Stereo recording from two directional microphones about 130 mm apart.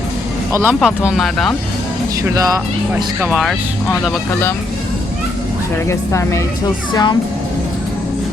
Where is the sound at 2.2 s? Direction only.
25° right (ahead or behind).